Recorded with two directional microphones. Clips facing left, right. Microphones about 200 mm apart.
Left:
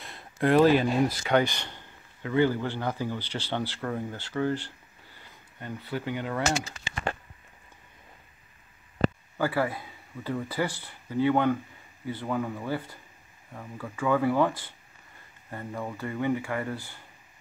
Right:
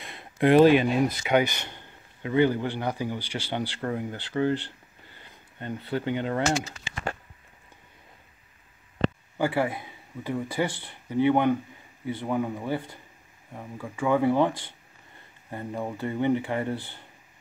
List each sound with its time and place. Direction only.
0.0 s a man's voice: 20° right (ahead or behind)
9.4 s a man's voice: 20° right (ahead or behind)
15.5 s a man's voice: 20° right (ahead or behind)